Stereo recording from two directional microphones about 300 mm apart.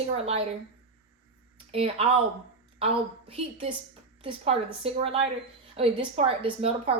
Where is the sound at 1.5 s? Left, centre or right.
Centre.